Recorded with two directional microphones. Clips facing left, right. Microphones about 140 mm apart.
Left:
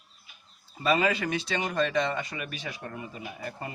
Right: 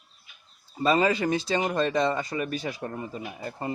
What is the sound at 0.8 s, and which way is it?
Speech, 35° right (ahead or behind).